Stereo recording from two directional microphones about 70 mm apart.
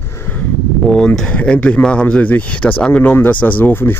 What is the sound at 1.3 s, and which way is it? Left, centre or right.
Speech, centre.